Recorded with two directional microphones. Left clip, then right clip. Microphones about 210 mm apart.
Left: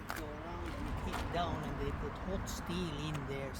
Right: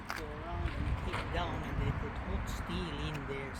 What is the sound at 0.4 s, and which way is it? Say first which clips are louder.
Boat: right 2 dB; 50° left (ahead or behind).